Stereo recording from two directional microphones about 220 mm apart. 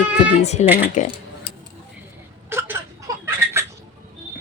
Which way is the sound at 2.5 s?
10° right (ahead or behind).